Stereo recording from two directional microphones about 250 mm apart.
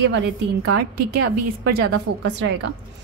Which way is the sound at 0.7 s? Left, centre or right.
Right.